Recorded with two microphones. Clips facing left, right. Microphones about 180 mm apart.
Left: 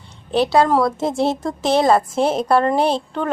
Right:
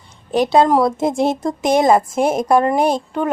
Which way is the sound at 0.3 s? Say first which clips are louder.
Right 2 dB; 15° right (ahead or behind).